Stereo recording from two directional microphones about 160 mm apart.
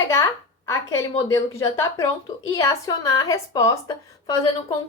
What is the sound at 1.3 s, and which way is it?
A woman's voice, 15° left (ahead or behind).